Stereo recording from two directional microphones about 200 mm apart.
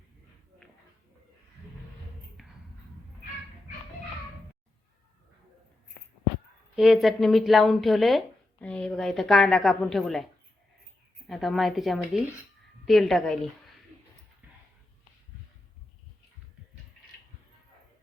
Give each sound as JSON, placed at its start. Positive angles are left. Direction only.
{"t": 2.4, "sound": "a sound", "side_deg": 0}
{"t": 6.7, "sound": "a woman's voice", "side_deg": 0}
{"t": 11.3, "sound": "a woman's voice", "side_deg": 0}